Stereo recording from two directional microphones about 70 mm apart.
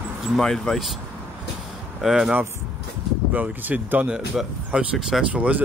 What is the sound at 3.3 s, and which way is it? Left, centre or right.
Speech, right.